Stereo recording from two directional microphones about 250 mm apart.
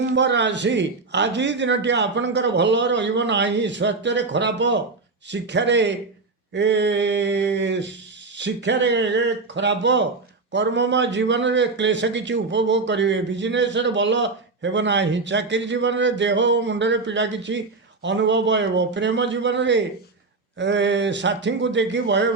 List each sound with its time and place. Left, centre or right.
0.1 s a man's voice: right